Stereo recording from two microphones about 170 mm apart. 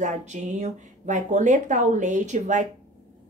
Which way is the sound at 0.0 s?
45° right (ahead or behind).